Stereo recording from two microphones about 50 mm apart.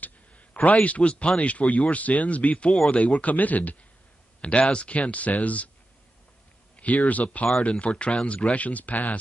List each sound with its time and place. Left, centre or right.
0.0 s a sound: left
0.8 s speech: left
4.4 s speech: left
6.8 s speech: left